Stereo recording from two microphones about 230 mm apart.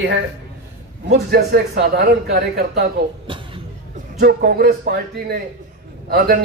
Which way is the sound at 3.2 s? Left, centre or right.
Right.